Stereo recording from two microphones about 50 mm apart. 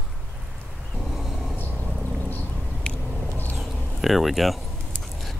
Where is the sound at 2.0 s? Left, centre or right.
Left.